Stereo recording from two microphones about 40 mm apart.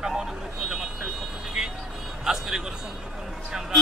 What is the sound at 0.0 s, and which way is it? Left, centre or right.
Vehicle, centre.